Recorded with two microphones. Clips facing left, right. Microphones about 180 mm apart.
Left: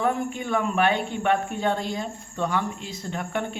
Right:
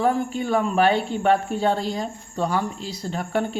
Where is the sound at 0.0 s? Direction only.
35° right (ahead or behind).